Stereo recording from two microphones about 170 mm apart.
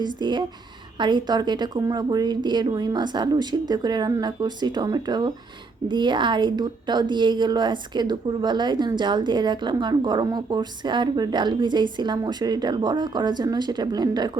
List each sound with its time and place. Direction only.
0.0 s a woman's voice: 25° right (ahead or behind)